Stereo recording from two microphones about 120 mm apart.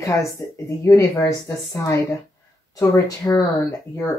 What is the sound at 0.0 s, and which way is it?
Speech, 25° left (ahead or behind).